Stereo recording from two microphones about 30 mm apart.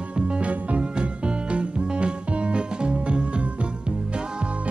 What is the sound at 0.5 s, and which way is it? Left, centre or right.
Music, right.